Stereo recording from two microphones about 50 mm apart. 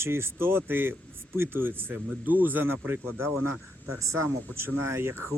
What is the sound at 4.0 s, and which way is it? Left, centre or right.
Speech, right.